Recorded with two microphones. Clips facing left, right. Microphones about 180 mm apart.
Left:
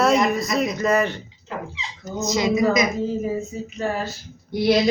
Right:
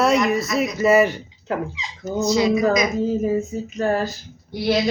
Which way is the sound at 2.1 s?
20° left (ahead or behind).